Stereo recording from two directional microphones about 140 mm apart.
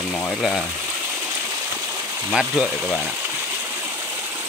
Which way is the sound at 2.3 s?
Centre (ahead or behind).